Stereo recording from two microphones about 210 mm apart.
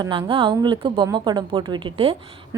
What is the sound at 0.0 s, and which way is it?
A woman's voice, 25° right (ahead or behind).